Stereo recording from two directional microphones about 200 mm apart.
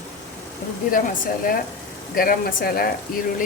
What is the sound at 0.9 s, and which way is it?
Speech, 45° left (ahead or behind).